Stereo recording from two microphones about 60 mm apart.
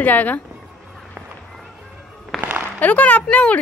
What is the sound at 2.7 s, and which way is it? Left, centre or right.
Speech, left.